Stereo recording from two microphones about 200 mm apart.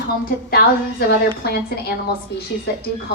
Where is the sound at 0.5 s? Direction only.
55° left (ahead or behind).